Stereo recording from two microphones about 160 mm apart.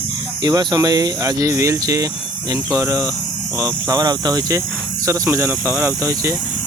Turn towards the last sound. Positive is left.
turn(degrees=-20)  # may be behind; listen again after turning